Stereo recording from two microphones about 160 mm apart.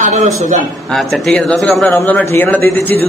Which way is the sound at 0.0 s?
50° right (ahead or behind).